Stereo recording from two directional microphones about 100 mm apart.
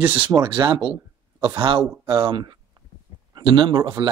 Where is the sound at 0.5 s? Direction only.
50° right (ahead or behind).